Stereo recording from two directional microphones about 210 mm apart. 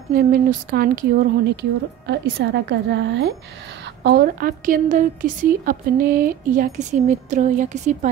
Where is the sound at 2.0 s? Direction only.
55° right (ahead or behind).